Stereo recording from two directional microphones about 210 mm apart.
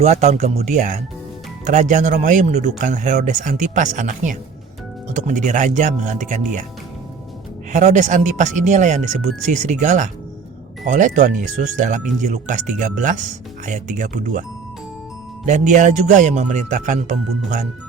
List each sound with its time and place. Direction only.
0.0 s speech: 30° right (ahead or behind)
7.7 s speech: 35° right (ahead or behind)
15.4 s speech: 35° right (ahead or behind)